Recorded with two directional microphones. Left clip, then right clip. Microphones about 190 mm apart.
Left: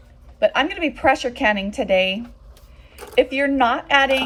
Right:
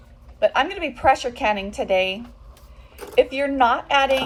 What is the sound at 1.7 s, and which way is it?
Speech, 50° left (ahead or behind).